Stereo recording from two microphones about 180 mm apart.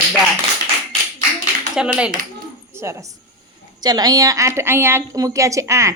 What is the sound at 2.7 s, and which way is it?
A woman's voice, 15° right (ahead or behind).